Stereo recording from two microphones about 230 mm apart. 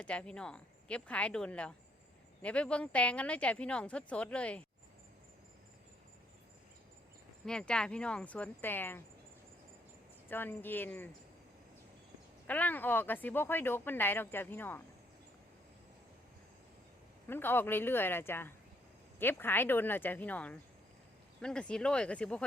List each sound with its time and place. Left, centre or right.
0.0 s speech: centre
7.4 s speech: centre
10.2 s speech: centre
12.5 s speech: centre
17.2 s speech: centre